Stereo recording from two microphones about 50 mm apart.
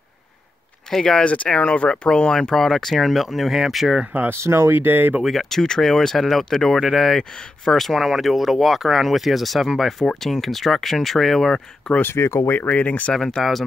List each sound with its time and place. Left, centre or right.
0.8 s speech: centre
1.2 s speech: left
2.5 s speech: centre
4.3 s speech: right
5.2 s speech: centre
12.0 s speech: left
12.6 s speech: left
13.1 s speech: centre